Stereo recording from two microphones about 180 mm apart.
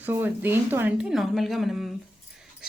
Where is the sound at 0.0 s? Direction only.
10° right (ahead or behind).